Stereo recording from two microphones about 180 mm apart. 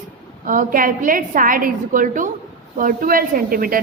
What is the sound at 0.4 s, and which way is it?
A woman's voice, 50° right (ahead or behind).